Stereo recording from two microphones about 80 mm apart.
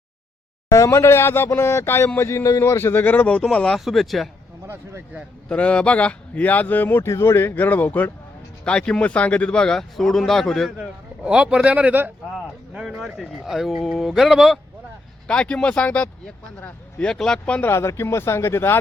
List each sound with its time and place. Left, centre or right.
0.7 s speech: left; by 3.4 s centre
3.4 s speech: centre
4.6 s speech: right
5.5 s speech: centre
10.8 s speech: centre
12.9 s speech: centre
15.3 s speech: centre
17.7 s speech: left